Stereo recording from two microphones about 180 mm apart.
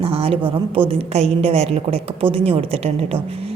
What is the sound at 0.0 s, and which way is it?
A woman's voice, 30° right (ahead or behind).